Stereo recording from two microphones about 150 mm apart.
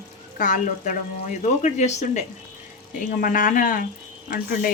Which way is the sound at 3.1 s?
65° left (ahead or behind).